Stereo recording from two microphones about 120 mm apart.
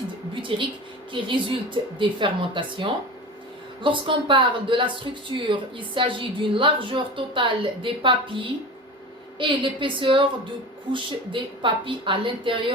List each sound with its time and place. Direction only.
0.5 s speech: 45° right (ahead or behind)